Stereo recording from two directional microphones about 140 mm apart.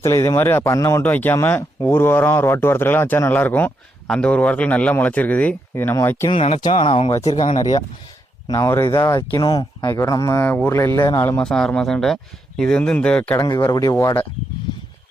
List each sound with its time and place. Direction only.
0.0 s speech: 20° left (ahead or behind)
6.3 s speech: 45° left (ahead or behind)
8.4 s speech: 25° left (ahead or behind)
11.3 s speech: 5° left (ahead or behind)
13.3 s speech: 25° left (ahead or behind)